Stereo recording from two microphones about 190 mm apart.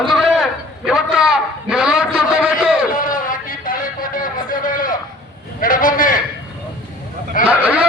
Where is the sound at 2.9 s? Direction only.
45° left (ahead or behind).